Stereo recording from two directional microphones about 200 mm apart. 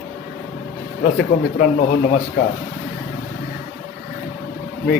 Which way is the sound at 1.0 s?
50° left (ahead or behind).